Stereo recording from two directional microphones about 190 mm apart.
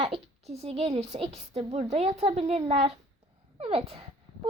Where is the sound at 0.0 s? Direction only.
35° right (ahead or behind).